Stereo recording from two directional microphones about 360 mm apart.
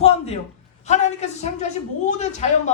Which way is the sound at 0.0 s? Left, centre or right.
Centre.